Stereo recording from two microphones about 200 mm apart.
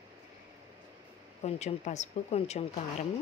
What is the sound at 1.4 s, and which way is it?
Speech, 35° left (ahead or behind).